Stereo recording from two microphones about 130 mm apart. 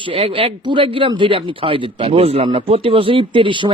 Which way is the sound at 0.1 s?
45° right (ahead or behind).